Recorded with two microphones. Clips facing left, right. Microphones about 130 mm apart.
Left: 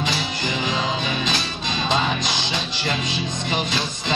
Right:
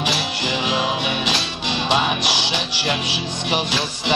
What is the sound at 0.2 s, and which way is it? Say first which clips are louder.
Music: right 2 dB; 70° right (ahead or behind).